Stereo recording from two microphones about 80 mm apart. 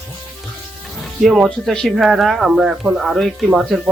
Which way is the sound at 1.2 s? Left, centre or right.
Centre.